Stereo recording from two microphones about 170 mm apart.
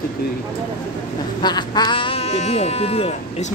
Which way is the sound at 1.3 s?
25° left (ahead or behind).